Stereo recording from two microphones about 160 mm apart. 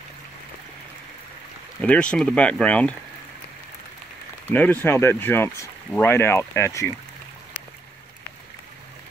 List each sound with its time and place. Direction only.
1.8 s speech: 5° left (ahead or behind)
4.5 s speech: 10° left (ahead or behind)